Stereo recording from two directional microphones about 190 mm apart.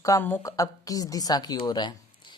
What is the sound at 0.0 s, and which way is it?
A woman's voice, 15° left (ahead or behind).